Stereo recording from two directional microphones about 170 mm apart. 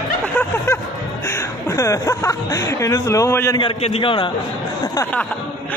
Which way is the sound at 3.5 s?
30° left (ahead or behind).